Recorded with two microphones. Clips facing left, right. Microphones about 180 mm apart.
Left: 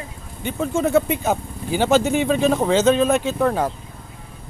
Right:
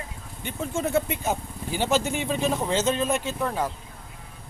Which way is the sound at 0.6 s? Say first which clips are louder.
Left 7 dB; 90° left.